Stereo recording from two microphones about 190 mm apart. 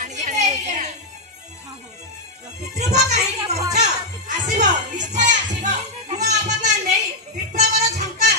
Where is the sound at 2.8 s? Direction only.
35° right (ahead or behind).